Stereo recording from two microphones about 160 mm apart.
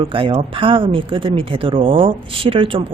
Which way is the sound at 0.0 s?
35° right (ahead or behind).